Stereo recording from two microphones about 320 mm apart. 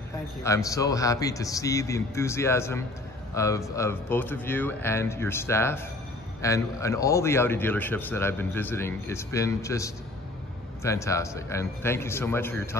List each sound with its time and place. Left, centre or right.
0.4 s a man's voice: centre